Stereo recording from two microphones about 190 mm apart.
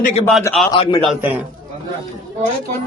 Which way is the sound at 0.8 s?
25° left (ahead or behind).